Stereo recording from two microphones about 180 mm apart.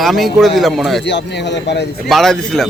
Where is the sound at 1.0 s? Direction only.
75° left (ahead or behind).